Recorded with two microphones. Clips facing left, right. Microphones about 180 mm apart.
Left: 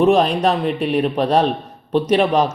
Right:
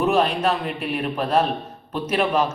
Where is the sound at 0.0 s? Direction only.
35° left (ahead or behind).